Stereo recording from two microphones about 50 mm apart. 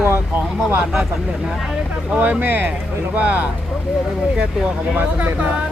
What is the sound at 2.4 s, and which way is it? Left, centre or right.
Speech, right.